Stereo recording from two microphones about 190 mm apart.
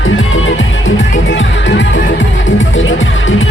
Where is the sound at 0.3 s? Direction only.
90° left.